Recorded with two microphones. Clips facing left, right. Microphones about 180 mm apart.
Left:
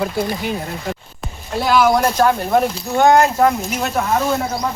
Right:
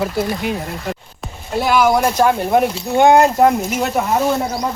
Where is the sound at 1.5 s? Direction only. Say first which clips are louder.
Even; 10° right (ahead or behind).